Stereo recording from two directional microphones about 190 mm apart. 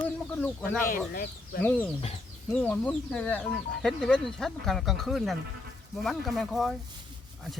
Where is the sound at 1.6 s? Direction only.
5° left (ahead or behind).